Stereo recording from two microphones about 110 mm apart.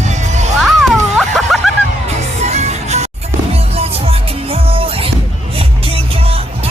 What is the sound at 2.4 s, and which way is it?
Music, 90° right.